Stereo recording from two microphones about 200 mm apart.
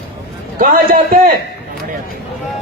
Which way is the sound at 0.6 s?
45° right (ahead or behind).